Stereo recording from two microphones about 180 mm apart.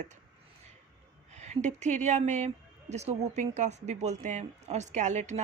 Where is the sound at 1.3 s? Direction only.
40° right (ahead or behind).